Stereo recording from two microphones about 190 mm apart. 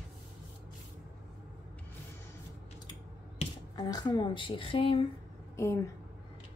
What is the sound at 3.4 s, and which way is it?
Speech, 20° left (ahead or behind).